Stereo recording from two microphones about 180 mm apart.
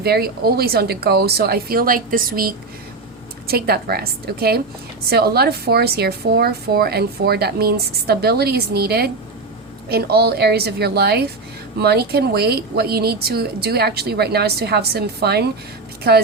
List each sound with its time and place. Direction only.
0.0 s a woman's voice: 60° right (ahead or behind)